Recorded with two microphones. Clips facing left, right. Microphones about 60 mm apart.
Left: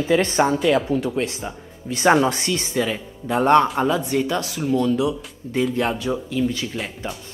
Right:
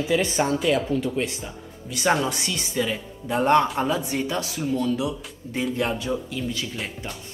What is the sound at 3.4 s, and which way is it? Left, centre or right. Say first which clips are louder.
Speech: left 3 dB; left.